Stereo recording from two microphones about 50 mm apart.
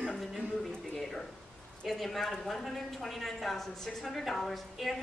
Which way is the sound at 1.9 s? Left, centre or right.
Centre.